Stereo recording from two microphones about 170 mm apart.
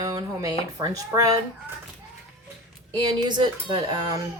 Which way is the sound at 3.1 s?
25° right (ahead or behind).